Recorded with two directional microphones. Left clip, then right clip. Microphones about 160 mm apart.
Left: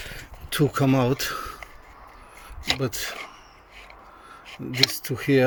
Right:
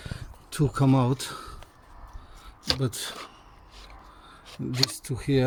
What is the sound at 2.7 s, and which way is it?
Speech, 15° right (ahead or behind).